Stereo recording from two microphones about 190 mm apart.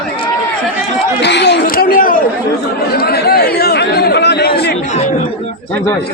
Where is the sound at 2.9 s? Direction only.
55° left (ahead or behind).